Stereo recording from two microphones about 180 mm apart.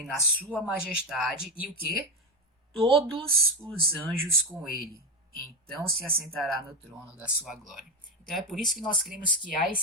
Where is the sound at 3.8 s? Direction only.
55° right (ahead or behind).